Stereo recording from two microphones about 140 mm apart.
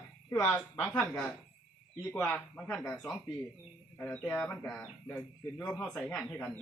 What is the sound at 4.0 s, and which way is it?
A woman's voice, 10° left (ahead or behind).